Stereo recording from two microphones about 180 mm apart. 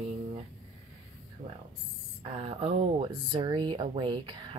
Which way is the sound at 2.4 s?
35° right (ahead or behind).